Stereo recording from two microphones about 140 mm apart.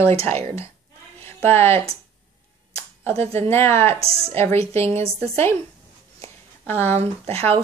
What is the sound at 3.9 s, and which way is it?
Speech, 45° right (ahead or behind).